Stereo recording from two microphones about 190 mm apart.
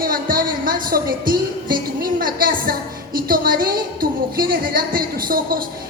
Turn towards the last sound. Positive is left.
turn(degrees=-50)  # may be behind; listen again after turning